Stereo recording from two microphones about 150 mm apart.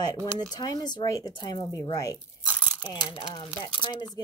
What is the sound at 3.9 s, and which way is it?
Speech, 30° left (ahead or behind).